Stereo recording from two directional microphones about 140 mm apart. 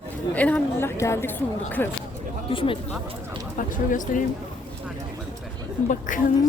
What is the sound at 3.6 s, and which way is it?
Speech, 70° left (ahead or behind).